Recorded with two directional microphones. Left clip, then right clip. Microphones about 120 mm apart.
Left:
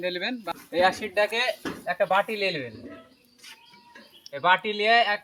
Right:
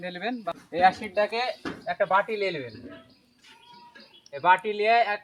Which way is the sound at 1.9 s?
45° left (ahead or behind).